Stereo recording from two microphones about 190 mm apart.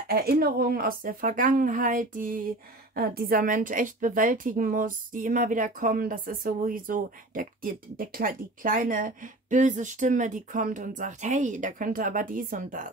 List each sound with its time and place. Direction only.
0.1 s a woman's voice: 55° right (ahead or behind)